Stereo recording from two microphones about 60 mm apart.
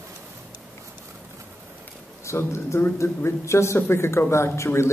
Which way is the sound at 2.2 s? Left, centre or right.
Left.